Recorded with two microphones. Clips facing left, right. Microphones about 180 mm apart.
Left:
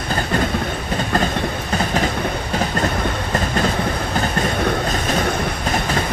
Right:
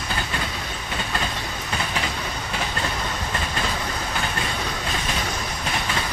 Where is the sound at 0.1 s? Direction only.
45° left (ahead or behind).